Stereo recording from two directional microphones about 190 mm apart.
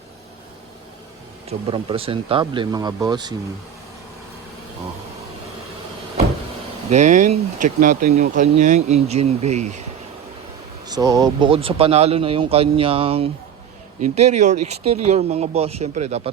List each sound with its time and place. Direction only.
1.5 s speech: 30° right (ahead or behind)
6.9 s speech: 40° right (ahead or behind)
10.8 s speech: 20° right (ahead or behind); by 16.3 s 35° right (ahead or behind)